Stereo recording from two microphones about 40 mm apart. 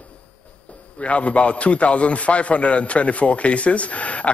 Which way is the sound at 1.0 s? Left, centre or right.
Left.